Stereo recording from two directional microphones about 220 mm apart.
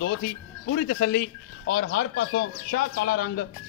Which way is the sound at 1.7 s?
45° left (ahead or behind).